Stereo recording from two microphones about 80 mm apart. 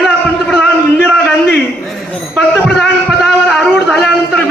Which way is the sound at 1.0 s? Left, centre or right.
Left.